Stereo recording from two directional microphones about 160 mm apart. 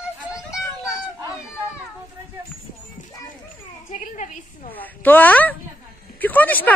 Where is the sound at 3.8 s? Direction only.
50° left (ahead or behind).